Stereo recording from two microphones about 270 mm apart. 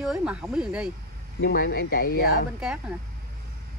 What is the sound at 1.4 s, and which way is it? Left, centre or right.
Speech, left.